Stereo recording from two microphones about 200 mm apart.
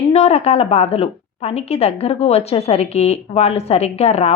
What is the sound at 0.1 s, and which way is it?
A woman's voice, 30° left (ahead or behind).